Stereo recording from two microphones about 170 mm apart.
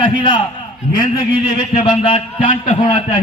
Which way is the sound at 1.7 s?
35° left (ahead or behind).